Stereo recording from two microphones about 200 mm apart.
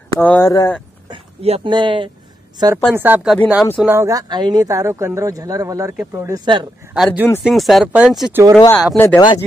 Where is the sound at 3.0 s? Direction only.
10° right (ahead or behind).